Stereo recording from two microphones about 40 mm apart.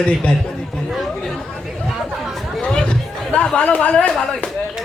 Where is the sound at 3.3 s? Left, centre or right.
Left.